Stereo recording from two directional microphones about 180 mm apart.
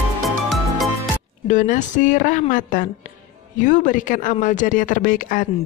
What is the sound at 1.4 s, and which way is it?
Speech, 45° left (ahead or behind).